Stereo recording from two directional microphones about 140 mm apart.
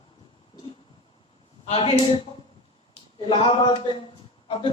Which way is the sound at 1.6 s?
45° left (ahead or behind).